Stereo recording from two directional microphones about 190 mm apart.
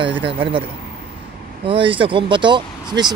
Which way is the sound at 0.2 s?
30° right (ahead or behind).